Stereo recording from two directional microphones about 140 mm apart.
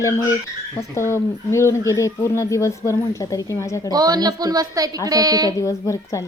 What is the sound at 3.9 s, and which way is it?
A woman's voice, 30° right (ahead or behind).